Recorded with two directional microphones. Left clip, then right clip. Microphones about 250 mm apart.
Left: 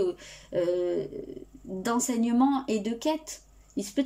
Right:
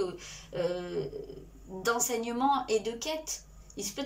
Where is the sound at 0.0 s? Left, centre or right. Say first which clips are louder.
Left 5 dB; left.